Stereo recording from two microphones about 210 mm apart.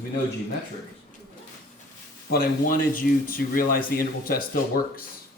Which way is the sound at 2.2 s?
45° left (ahead or behind).